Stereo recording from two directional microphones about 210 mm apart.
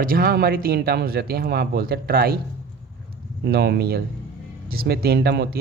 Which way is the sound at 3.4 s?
50° right (ahead or behind).